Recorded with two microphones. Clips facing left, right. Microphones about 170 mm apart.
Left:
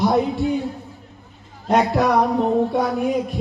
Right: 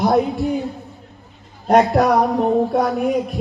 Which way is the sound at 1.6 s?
45° right (ahead or behind).